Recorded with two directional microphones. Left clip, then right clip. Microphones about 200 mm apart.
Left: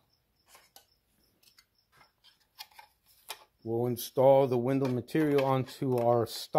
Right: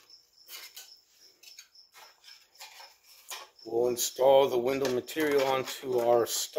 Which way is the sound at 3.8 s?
35° left (ahead or behind).